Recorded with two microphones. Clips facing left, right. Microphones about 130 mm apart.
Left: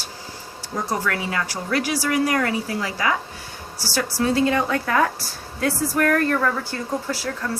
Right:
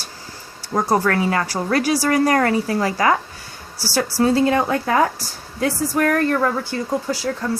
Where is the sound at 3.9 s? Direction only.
30° right (ahead or behind).